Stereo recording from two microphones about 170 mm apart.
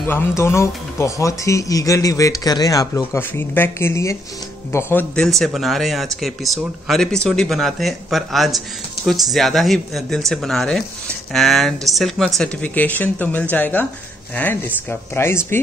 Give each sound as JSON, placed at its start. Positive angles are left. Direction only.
{"t": 0.4, "sound": "speech", "side_deg": 15}